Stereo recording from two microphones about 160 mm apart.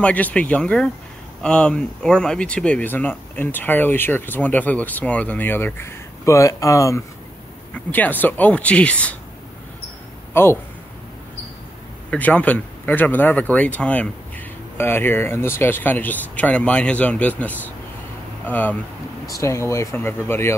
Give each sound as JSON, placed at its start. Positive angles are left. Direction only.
{"t": 0.0, "sound": "speech", "side_deg": 10}
{"t": 10.3, "sound": "speech", "side_deg": 15}
{"t": 12.1, "sound": "speech", "side_deg": 10}